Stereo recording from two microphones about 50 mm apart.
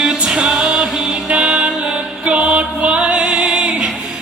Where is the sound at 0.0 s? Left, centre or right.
Centre.